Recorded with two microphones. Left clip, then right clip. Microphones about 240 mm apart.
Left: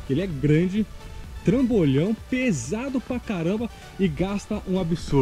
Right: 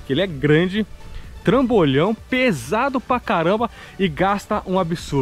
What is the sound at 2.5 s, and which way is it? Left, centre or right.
Speech, centre.